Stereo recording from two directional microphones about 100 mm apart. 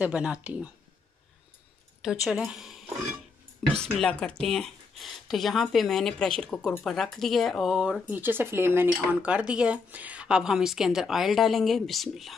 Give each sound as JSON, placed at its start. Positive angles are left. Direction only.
{"t": 0.0, "sound": "speech", "side_deg": -10}
{"t": 2.0, "sound": "a woman's voice", "side_deg": -5}
{"t": 3.7, "sound": "speech", "side_deg": 10}
{"t": 8.1, "sound": "speech", "side_deg": -20}
{"t": 8.9, "sound": "speech", "side_deg": -15}